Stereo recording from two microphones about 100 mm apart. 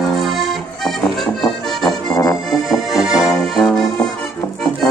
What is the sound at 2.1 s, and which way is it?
Accordion, 35° left (ahead or behind).